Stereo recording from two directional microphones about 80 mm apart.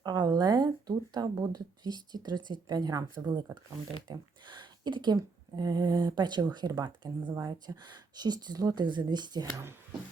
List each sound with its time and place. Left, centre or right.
0.0 s speech: right
7.3 s speech: right
7.9 s speech: right